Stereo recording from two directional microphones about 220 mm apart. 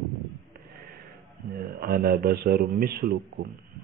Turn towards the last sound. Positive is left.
turn(degrees=-45)  # may be behind; listen again after turning